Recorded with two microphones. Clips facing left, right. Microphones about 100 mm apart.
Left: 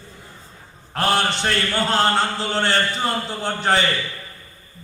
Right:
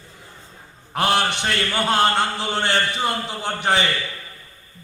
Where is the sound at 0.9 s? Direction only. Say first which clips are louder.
Even; 20° right (ahead or behind).